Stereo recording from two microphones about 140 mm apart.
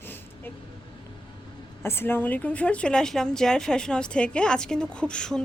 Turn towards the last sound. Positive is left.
turn(degrees=5)  # may be behind; listen again after turning